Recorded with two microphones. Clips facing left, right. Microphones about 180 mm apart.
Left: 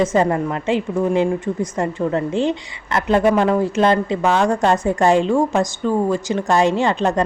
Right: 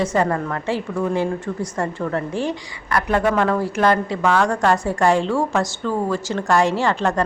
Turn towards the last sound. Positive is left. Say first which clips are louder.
# left 2 dB
turn(degrees=20)  # may be behind; listen again after turning